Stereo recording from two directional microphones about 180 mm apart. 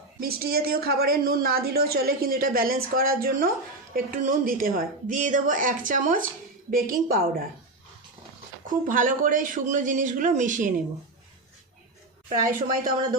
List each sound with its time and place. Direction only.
0.2 s a woman's voice: 55° right (ahead or behind)
8.6 s a woman's voice: 45° right (ahead or behind)
12.4 s speech: 20° right (ahead or behind)